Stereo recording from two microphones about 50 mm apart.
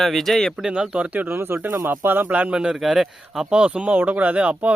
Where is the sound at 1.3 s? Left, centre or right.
Right.